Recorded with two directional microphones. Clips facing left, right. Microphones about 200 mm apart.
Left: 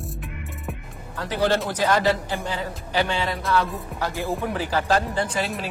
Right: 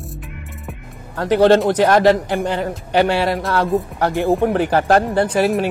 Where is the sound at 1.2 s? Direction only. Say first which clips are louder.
Right 10 dB; 85° right; by 3.4 s 70° right (ahead or behind).